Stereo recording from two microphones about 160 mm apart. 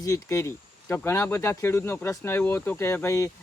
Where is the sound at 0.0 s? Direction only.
20° left (ahead or behind).